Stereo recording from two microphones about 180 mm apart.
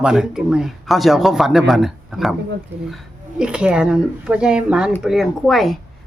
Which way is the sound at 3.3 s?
5° right (ahead or behind).